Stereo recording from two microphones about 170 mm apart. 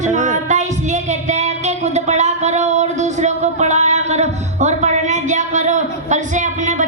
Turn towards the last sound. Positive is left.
turn(degrees=-45)  # may be behind; listen again after turning